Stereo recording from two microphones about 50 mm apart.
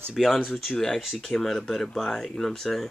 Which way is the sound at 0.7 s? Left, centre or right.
Centre.